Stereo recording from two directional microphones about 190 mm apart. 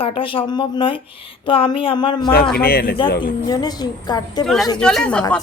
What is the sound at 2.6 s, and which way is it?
Speech, 55° left (ahead or behind).